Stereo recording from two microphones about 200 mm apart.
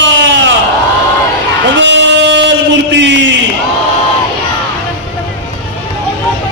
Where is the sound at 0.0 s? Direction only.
65° right (ahead or behind).